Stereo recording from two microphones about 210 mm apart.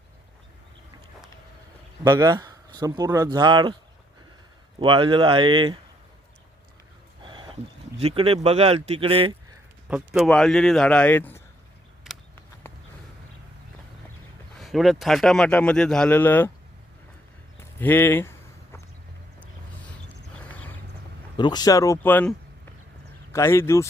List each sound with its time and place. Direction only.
2.0 s speech: 15° right (ahead or behind)
4.8 s speech: 25° right (ahead or behind)
7.2 s speech: 20° right (ahead or behind)
9.9 s speech: 5° right (ahead or behind)
12.7 s a sound: 10° left (ahead or behind)
14.6 s speech: centre (ahead or behind)
17.6 s walk: 10° left (ahead or behind)
20.3 s a sound: 5° left (ahead or behind)
21.3 s speech: 20° left (ahead or behind)